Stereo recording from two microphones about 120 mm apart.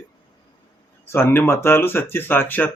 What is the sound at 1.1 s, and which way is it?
Speech, 20° left (ahead or behind).